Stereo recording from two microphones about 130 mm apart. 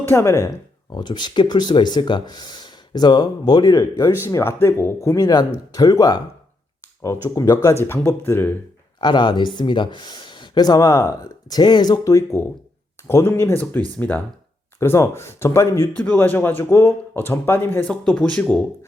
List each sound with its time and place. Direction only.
0.1 s speech: 20° left (ahead or behind)
0.9 s speech: 35° left (ahead or behind); by 8.5 s 15° left (ahead or behind)
9.0 s speech: 35° left (ahead or behind); by 18.6 s 5° left (ahead or behind)